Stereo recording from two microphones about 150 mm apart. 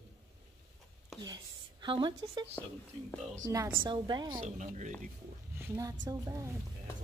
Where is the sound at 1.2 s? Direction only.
30° right (ahead or behind).